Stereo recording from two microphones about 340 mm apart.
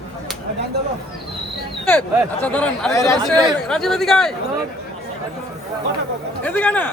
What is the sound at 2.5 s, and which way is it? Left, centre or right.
A man's voice, centre.